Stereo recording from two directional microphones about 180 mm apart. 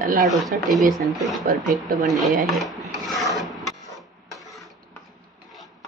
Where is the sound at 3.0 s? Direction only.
Centre (ahead or behind).